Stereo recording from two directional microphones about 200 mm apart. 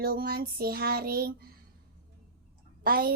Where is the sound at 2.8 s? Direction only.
45° right (ahead or behind).